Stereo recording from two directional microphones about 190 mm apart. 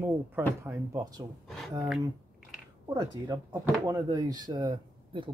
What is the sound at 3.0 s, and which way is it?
Speech, 20° right (ahead or behind).